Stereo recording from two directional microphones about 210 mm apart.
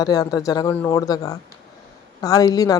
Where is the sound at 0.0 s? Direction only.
15° left (ahead or behind).